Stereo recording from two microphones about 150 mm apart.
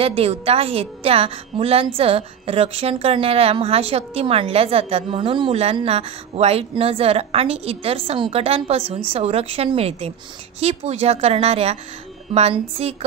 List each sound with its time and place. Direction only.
0.0 s a woman's voice: 40° right (ahead or behind)